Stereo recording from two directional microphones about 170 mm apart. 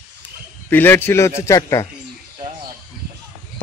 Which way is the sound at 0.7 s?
10° left (ahead or behind).